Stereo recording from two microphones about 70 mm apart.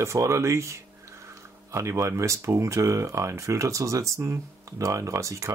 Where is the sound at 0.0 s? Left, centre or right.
Right.